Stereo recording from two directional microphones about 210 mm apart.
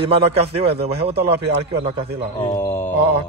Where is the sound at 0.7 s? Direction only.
50° right (ahead or behind).